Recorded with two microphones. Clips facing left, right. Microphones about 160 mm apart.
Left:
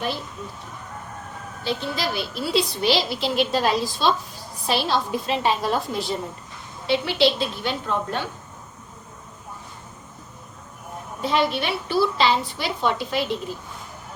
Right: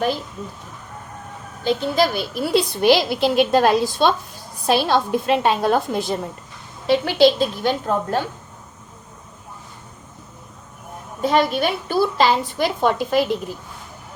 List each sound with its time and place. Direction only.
1.6 s a woman's voice: 50° right (ahead or behind)
11.2 s a woman's voice: 45° right (ahead or behind)